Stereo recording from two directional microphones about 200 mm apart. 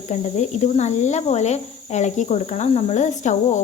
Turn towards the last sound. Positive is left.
turn(degrees=35)  # may be behind; listen again after turning